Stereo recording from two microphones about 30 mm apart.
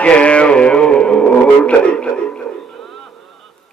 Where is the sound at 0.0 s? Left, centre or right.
Left.